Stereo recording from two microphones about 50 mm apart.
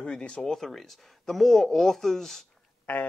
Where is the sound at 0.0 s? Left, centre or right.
Centre.